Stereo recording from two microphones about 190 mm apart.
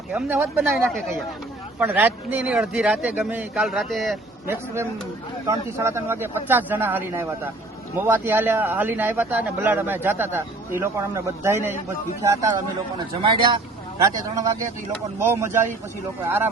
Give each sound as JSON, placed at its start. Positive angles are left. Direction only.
{"t": 0.1, "sound": "a man's voice", "side_deg": -10}
{"t": 4.4, "sound": "a man's voice", "side_deg": -15}